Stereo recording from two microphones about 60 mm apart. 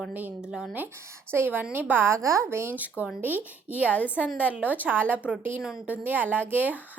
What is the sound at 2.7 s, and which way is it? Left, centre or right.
A woman's voice, right.